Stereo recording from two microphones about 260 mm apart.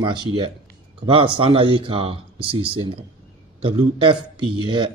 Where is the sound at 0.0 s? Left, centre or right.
Centre.